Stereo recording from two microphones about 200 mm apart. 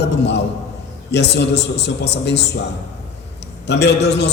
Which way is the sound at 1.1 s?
60° left (ahead or behind).